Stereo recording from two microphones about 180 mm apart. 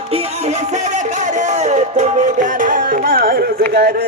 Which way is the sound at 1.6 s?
40° right (ahead or behind).